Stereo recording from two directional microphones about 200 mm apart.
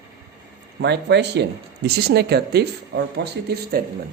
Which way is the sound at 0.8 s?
60° right (ahead or behind).